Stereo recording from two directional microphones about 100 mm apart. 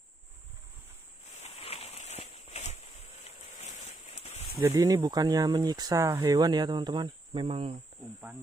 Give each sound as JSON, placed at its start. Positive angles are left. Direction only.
{"t": 1.4, "sound": "a sound", "side_deg": 90}
{"t": 4.7, "sound": "speech", "side_deg": -40}
{"t": 7.4, "sound": "cricket", "side_deg": -75}